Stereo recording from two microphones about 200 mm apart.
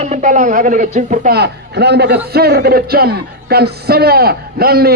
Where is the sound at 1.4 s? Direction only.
55° right (ahead or behind).